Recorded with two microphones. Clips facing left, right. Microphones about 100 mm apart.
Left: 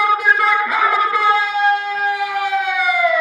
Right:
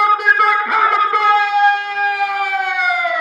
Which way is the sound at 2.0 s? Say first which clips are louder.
Right 1 dB; 50° right (ahead or behind).